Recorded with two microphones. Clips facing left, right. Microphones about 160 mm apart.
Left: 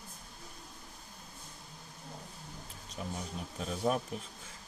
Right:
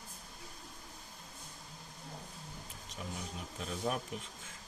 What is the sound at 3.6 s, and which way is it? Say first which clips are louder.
Speech: left 5 dB; 35° left (ahead or behind).